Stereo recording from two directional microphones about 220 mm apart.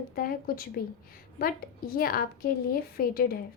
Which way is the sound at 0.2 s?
40° left (ahead or behind).